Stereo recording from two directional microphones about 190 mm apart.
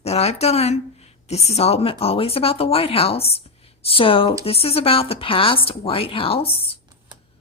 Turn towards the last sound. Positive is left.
turn(degrees=30)  # may be behind; listen again after turning